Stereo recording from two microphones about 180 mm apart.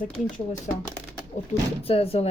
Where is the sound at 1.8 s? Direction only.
35° left (ahead or behind).